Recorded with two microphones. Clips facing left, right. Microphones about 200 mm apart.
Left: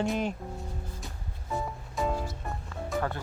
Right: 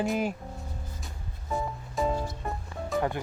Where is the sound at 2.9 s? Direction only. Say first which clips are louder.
Right 3 dB; 15° right (ahead or behind).